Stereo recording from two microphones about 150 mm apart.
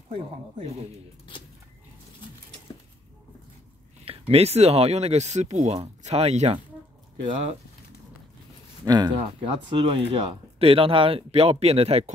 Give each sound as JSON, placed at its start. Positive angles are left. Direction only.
{"t": 4.0, "sound": "speech", "side_deg": -40}
{"t": 8.8, "sound": "speech", "side_deg": -25}
{"t": 9.2, "sound": "speech", "side_deg": -40}